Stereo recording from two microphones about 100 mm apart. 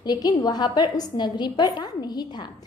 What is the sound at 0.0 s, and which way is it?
A woman's voice, 40° left (ahead or behind).